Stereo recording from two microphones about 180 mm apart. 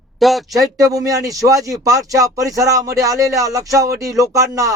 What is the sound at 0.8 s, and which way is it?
Speech, 20° right (ahead or behind).